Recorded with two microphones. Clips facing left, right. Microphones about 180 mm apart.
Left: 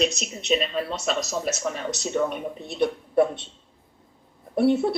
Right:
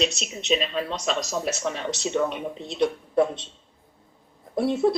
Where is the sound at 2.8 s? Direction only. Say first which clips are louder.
Left 1 dB; 5° left (ahead or behind).